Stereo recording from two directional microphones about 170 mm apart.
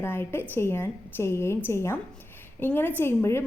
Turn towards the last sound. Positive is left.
turn(degrees=15)  # may be behind; listen again after turning